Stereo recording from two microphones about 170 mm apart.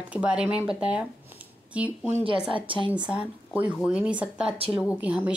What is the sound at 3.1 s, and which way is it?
Speech, 5° right (ahead or behind).